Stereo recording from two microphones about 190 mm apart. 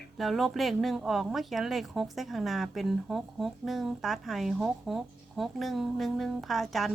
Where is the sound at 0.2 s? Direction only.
Centre (ahead or behind).